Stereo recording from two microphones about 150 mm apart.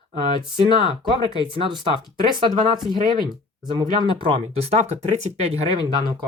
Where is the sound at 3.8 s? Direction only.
30° right (ahead or behind).